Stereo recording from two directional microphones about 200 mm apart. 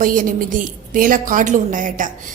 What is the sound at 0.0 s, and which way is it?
A woman's voice, 45° right (ahead or behind).